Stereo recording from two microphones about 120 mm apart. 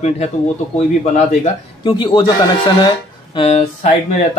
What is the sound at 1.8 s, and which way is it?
Speech, 45° left (ahead or behind).